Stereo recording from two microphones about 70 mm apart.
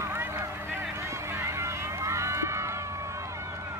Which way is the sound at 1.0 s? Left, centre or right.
Right.